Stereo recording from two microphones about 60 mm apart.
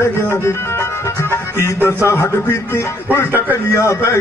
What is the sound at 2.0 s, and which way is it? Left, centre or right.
A man's voice, left.